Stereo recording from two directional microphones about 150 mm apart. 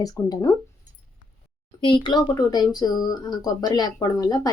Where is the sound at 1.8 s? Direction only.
35° left (ahead or behind).